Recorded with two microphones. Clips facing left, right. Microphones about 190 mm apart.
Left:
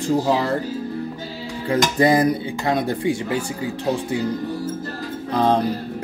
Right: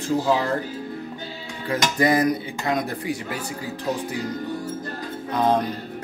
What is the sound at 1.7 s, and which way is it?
Speech, 30° left (ahead or behind).